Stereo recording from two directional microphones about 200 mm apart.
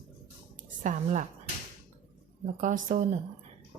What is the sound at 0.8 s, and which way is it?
Speech, 40° right (ahead or behind).